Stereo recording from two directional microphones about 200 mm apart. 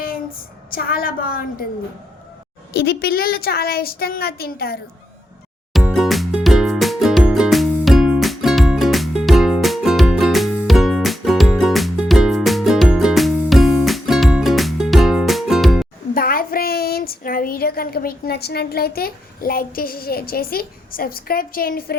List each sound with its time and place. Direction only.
0.7 s a woman's voice: 45° left (ahead or behind)
2.7 s a woman's voice: 55° left (ahead or behind)
5.7 s music: centre (ahead or behind)
16.1 s child singing: 45° left (ahead or behind)